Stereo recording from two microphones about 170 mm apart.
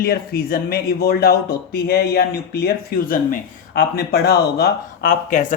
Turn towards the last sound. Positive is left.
turn(degrees=50)  # may be behind; listen again after turning